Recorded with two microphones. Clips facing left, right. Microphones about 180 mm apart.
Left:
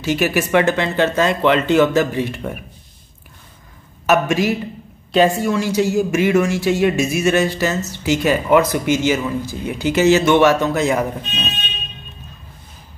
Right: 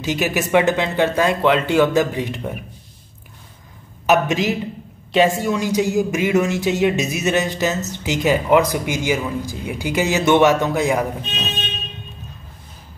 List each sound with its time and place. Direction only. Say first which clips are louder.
0.0 s speech: left 3 dB; 15° right (ahead or behind)
4.0 s speech: left 1 dB; 20° right (ahead or behind)